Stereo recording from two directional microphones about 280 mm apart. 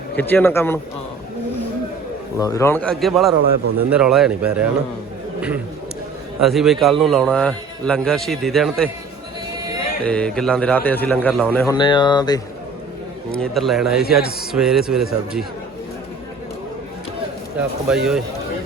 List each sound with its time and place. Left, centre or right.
0.2 s speech: centre
2.4 s a man's voice: centre
6.4 s a man's voice: centre
10.0 s a man's voice: centre
11.8 s speech: centre
13.3 s a man's voice: centre
17.6 s a man's voice: centre